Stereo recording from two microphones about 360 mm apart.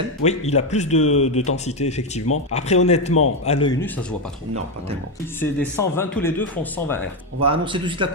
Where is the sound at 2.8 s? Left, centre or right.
Centre.